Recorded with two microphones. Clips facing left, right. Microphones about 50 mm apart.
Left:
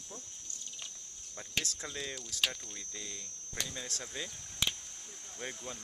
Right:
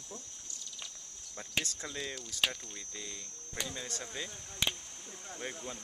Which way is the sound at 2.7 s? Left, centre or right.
Centre.